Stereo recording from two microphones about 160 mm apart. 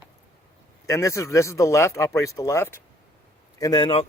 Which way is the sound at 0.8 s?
20° left (ahead or behind).